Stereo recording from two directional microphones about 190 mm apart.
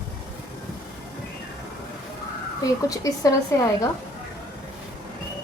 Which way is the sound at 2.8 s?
20° left (ahead or behind).